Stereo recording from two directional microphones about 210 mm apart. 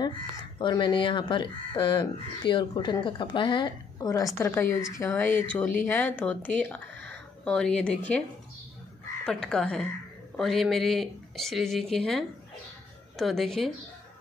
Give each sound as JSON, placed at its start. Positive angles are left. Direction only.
{"t": 0.6, "sound": "speech", "side_deg": 20}
{"t": 9.2, "sound": "speech", "side_deg": 5}